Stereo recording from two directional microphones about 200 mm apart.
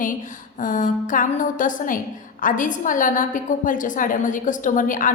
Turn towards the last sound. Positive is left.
turn(degrees=40)  # may be behind; listen again after turning